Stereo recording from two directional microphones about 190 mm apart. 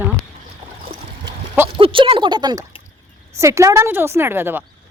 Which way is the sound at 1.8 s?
30° right (ahead or behind).